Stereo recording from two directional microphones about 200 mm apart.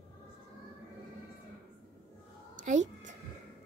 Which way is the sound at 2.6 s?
40° right (ahead or behind).